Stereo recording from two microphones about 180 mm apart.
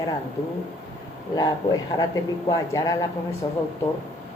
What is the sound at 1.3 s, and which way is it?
Speech, 20° left (ahead or behind).